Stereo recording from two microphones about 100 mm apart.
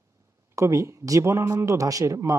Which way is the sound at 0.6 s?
30° right (ahead or behind).